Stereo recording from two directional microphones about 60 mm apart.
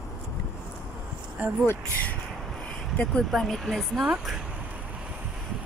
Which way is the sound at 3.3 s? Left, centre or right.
Centre.